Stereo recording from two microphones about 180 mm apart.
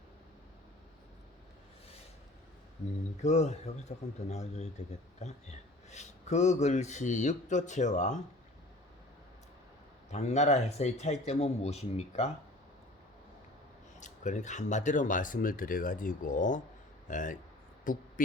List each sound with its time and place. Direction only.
3.2 s speech: 40° left (ahead or behind)
10.1 s speech: 40° left (ahead or behind)
14.0 s speech: 40° left (ahead or behind)